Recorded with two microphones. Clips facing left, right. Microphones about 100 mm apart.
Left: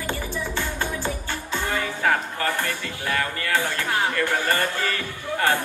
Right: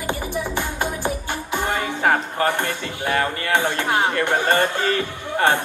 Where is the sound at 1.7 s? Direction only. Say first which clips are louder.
Right 3 dB; 20° right (ahead or behind).